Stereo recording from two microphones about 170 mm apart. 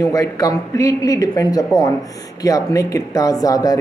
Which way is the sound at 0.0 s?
20° left (ahead or behind).